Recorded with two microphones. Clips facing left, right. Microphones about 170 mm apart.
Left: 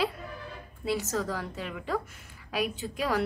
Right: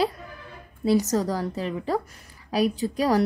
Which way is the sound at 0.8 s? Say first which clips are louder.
Right 8 dB; 40° right (ahead or behind).